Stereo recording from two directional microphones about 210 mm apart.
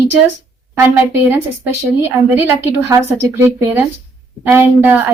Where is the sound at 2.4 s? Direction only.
10° right (ahead or behind).